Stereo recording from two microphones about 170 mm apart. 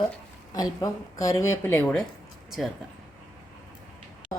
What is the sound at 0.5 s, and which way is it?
Speech, 20° left (ahead or behind).